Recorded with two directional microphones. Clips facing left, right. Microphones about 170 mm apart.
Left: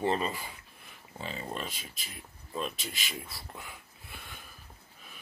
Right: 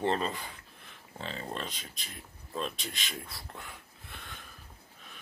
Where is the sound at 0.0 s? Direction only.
5° left (ahead or behind).